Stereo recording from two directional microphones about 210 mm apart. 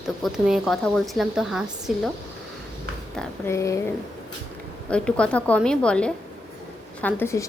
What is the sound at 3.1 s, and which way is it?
Speech, 15° left (ahead or behind).